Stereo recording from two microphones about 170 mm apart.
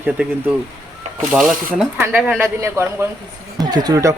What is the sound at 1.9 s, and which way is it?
Speech, 15° right (ahead or behind).